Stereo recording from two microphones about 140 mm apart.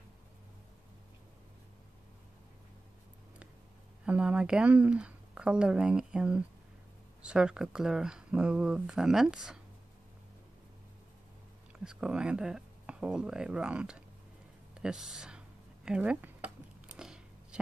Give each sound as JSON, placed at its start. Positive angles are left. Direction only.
{"t": 4.0, "sound": "speech", "side_deg": -10}
{"t": 11.8, "sound": "speech", "side_deg": -5}
{"t": 14.7, "sound": "a sound", "side_deg": -5}